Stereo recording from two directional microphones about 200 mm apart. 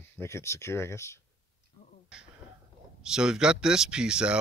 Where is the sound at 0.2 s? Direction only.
15° left (ahead or behind).